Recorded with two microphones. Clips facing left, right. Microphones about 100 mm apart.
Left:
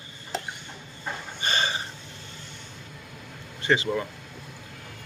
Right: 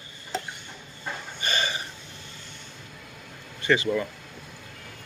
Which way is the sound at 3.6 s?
25° left (ahead or behind).